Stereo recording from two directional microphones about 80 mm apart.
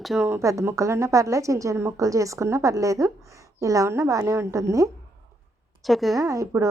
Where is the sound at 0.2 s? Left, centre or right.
Right.